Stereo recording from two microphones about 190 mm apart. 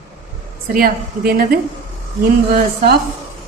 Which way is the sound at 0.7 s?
50° right (ahead or behind).